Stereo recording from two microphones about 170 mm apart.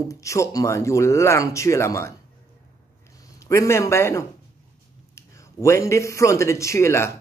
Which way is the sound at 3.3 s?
20° left (ahead or behind).